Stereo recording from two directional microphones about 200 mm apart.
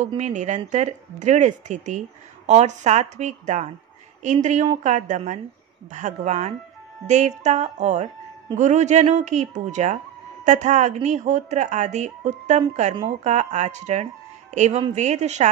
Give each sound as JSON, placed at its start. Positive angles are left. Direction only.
{"t": 0.2, "sound": "speech", "side_deg": -40}